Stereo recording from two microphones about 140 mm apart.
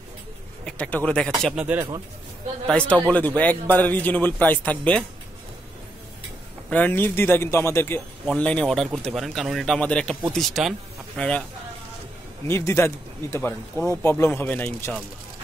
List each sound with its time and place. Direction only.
0.7 s speech: 10° left (ahead or behind)
1.6 s speech: 10° right (ahead or behind)
2.6 s speech: 5° left (ahead or behind)
6.7 s speech: 15° left (ahead or behind)
12.4 s speech: 20° left (ahead or behind)